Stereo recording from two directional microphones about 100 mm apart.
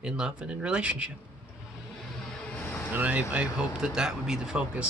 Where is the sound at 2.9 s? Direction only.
15° right (ahead or behind).